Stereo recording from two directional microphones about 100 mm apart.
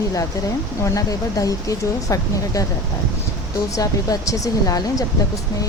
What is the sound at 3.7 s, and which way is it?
A woman's voice, 35° left (ahead or behind).